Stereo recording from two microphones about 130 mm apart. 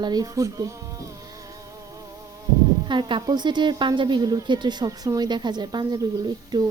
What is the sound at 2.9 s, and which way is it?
A woman's voice, 40° right (ahead or behind).